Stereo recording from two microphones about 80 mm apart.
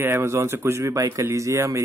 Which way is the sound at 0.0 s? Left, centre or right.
Right.